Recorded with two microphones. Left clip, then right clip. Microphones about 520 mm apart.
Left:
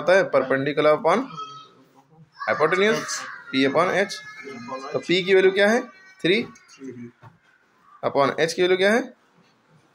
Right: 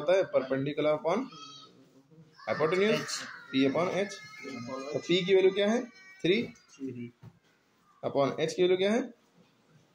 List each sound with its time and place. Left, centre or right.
0.0 s speech: right
2.4 s speech: right
8.0 s speech: right